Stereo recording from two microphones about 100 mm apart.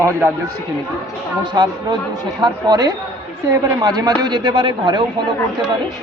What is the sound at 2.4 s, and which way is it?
Speech, 45° right (ahead or behind).